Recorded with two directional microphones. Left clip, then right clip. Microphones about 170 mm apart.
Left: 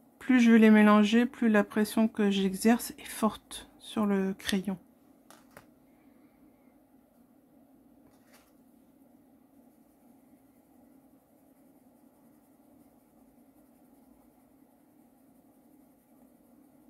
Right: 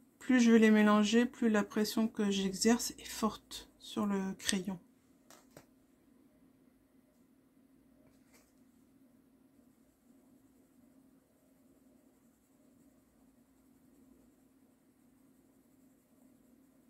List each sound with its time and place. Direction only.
0.2 s speech: 20° left (ahead or behind)